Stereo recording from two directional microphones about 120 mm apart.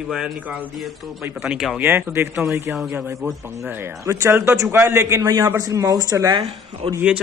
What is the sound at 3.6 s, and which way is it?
A man's voice, 25° right (ahead or behind).